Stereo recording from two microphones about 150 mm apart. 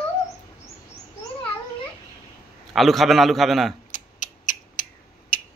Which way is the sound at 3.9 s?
60° left (ahead or behind).